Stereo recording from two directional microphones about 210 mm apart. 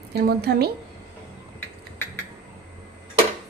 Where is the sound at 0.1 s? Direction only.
50° right (ahead or behind).